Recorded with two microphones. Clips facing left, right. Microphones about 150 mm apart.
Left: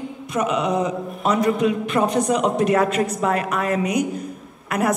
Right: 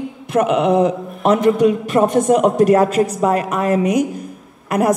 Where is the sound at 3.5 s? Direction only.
45° right (ahead or behind).